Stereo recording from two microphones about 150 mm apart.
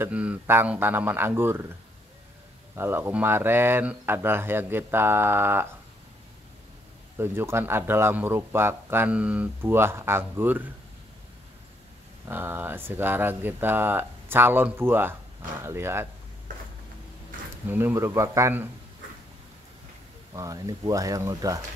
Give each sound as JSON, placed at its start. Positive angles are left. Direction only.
{"t": 0.0, "sound": "a man's voice", "side_deg": -10}
{"t": 2.7, "sound": "a man's voice", "side_deg": -15}
{"t": 7.2, "sound": "a man's voice", "side_deg": -15}
{"t": 12.3, "sound": "a man's voice", "side_deg": -15}
{"t": 17.6, "sound": "a man's voice", "side_deg": -15}
{"t": 20.3, "sound": "speech", "side_deg": -25}